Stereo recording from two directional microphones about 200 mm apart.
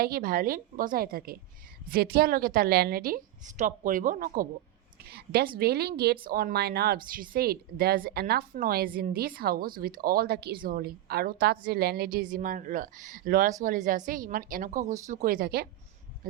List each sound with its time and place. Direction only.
0.0 s speech: 45° right (ahead or behind)